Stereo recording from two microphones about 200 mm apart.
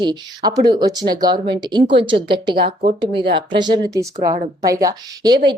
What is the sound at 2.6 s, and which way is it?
Speech, 50° right (ahead or behind).